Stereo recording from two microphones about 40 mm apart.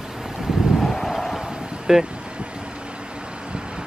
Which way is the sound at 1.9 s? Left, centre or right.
Centre.